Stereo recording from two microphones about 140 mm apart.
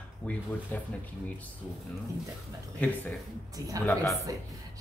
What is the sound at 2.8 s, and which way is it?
Speech, 10° left (ahead or behind).